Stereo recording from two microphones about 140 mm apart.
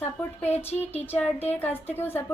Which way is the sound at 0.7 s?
50° left (ahead or behind).